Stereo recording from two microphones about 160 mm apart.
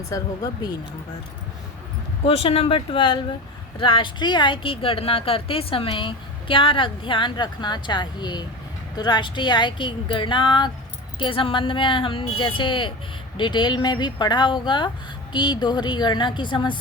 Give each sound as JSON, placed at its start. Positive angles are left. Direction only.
{"t": 0.1, "sound": "speech", "side_deg": 25}
{"t": 2.2, "sound": "speech", "side_deg": 35}